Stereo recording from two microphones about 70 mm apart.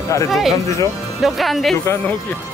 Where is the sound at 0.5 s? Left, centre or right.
Left.